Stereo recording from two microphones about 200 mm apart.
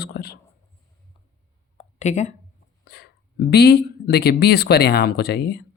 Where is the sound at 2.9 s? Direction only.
55° left (ahead or behind).